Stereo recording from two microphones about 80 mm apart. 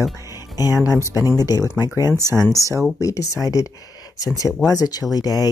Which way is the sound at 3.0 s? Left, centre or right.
Left.